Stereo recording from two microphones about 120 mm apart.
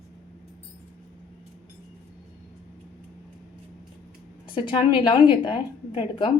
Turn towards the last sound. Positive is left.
turn(degrees=45)  # may be behind; listen again after turning